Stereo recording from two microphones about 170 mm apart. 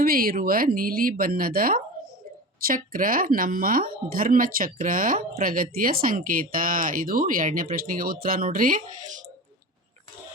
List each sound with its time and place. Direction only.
0.0 s speech: 60° right (ahead or behind)